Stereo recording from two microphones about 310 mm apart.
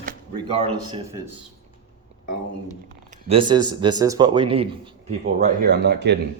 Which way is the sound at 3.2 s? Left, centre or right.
Centre.